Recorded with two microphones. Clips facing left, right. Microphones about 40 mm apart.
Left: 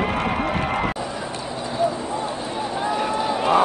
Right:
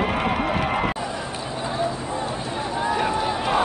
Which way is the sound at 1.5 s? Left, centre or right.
Right.